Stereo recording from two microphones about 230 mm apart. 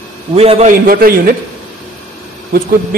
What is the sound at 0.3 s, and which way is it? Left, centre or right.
A man's voice, right.